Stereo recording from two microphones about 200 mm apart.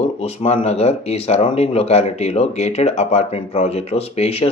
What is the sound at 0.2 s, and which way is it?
Speech, 30° left (ahead or behind).